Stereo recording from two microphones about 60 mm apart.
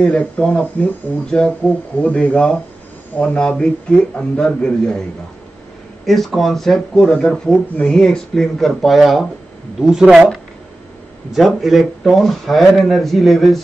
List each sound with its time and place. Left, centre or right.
0.0 s a man's voice: centre
6.0 s speech: centre
11.3 s speech: centre